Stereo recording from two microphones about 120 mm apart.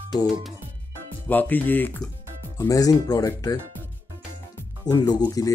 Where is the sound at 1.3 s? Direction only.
15° left (ahead or behind).